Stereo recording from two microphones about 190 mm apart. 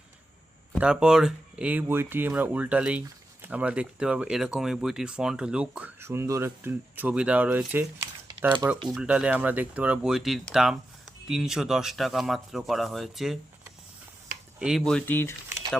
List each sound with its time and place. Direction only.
0.8 s speech: 5° right (ahead or behind)
14.6 s speech: centre (ahead or behind)